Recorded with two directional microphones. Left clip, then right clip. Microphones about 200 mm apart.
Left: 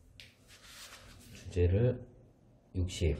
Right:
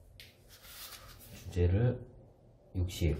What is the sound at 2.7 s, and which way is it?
Speech, 40° left (ahead or behind).